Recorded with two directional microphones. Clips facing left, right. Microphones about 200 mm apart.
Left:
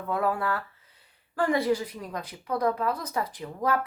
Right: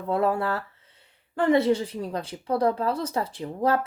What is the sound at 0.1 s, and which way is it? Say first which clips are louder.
A woman's voice: right 3 dB; 25° right (ahead or behind).